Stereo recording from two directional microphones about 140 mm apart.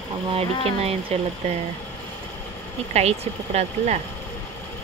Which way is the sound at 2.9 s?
50° right (ahead or behind).